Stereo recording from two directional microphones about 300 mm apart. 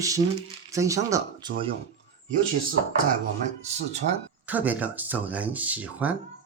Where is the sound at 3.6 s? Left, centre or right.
Right.